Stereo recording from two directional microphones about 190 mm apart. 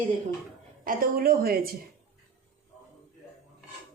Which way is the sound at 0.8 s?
50° right (ahead or behind).